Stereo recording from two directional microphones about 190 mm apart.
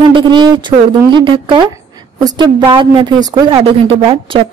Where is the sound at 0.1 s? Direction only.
25° right (ahead or behind).